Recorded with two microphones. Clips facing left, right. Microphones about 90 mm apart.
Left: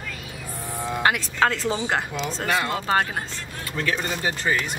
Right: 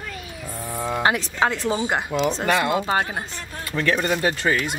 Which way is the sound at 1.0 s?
20° right (ahead or behind).